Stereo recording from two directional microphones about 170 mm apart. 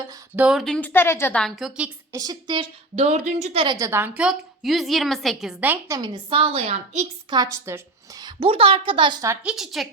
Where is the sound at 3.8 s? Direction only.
15° right (ahead or behind).